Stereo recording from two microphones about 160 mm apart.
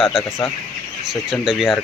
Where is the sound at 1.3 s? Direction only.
Centre (ahead or behind).